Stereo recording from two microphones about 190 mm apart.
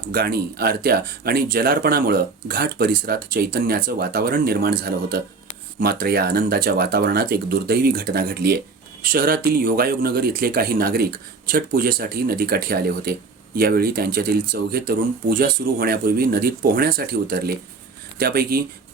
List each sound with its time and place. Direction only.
0.1 s speech: 50° right (ahead or behind)
5.8 s speech: 55° right (ahead or behind)